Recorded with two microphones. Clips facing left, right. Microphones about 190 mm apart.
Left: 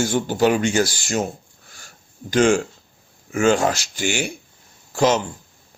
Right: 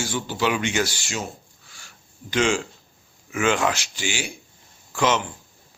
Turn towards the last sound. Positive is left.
turn(degrees=35)  # may be behind; listen again after turning